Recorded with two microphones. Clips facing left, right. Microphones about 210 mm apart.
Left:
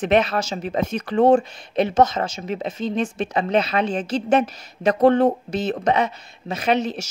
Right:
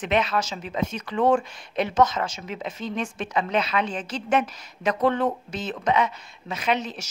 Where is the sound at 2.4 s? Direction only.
40° left (ahead or behind).